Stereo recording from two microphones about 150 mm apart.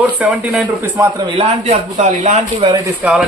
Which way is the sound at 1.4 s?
50° right (ahead or behind).